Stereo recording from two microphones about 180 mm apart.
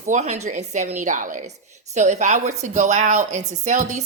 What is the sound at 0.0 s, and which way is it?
A woman's voice, 40° right (ahead or behind).